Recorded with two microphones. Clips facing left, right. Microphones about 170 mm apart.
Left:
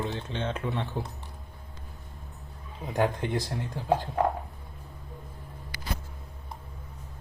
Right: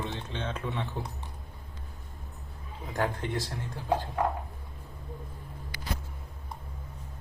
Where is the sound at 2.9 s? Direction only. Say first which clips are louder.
Left 4 dB; 20° left (ahead or behind).